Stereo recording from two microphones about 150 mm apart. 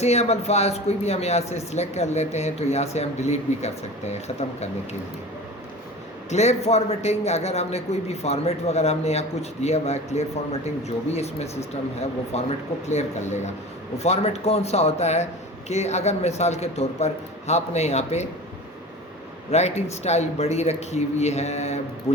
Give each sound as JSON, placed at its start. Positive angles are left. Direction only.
{"t": 0.0, "sound": "speech", "side_deg": 45}
{"t": 6.3, "sound": "speech", "side_deg": 45}
{"t": 19.5, "sound": "speech", "side_deg": 45}